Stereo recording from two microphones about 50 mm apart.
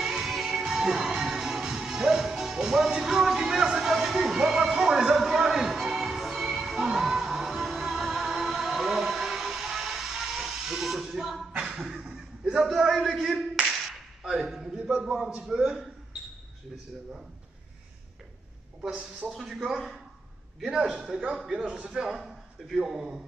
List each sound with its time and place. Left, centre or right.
0.0 s music: centre
11.5 s a sound: centre
13.1 s clapping: centre
13.7 s whip: centre
14.8 s a sound: centre
15.2 s a man's voice: centre
18.9 s a man's voice: centre
22.0 s a man's voice: centre